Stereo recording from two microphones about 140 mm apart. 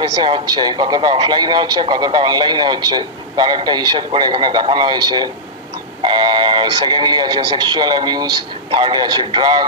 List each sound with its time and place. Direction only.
0.2 s a man's voice: 30° right (ahead or behind)